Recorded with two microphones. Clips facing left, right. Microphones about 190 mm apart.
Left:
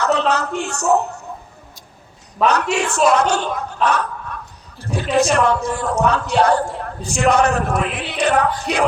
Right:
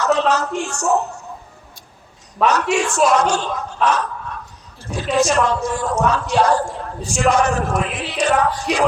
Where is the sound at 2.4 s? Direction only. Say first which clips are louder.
Even; centre (ahead or behind).